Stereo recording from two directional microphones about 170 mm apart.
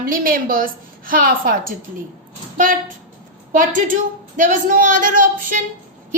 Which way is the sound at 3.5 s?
50° right (ahead or behind).